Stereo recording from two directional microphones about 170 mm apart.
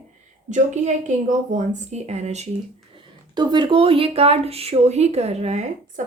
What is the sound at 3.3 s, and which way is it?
A woman's voice, 25° right (ahead or behind).